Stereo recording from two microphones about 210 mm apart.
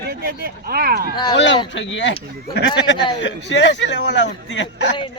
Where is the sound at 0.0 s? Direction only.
45° right (ahead or behind).